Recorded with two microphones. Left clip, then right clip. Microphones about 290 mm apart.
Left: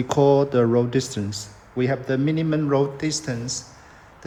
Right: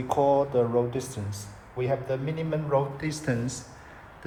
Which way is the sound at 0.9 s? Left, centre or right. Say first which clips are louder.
Left 8 dB; left.